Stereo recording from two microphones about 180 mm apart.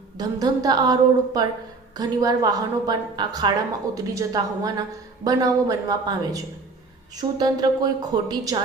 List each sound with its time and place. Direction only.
0.2 s a woman's voice: 20° right (ahead or behind)